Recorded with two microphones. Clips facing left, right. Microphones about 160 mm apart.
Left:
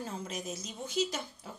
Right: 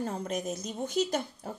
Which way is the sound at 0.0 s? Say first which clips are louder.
Right 6 dB; 60° right (ahead or behind).